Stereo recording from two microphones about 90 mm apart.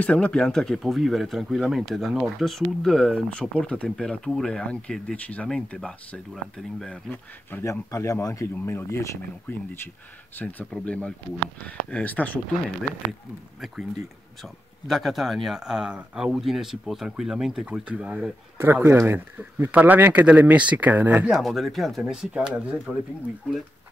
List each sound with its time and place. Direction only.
0.0 s speech: 15° left (ahead or behind)
3.3 s speech: 15° left (ahead or behind)
7.6 s speech: 35° left (ahead or behind); by 12.4 s 15° left (ahead or behind)
14.9 s speech: centre (ahead or behind)
18.6 s speech: 30° right (ahead or behind)
21.3 s speech: centre (ahead or behind)